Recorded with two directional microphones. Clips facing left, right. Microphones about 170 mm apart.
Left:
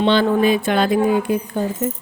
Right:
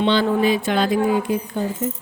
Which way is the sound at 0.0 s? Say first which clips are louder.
Left 2 dB; 55° left (ahead or behind).